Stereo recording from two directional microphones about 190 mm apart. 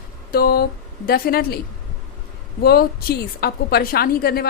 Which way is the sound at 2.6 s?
55° left (ahead or behind).